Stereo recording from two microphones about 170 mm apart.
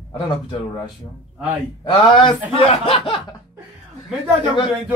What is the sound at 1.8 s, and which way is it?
Speech, 30° left (ahead or behind).